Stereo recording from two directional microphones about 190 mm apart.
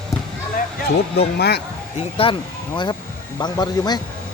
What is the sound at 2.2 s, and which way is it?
Speech, 30° left (ahead or behind).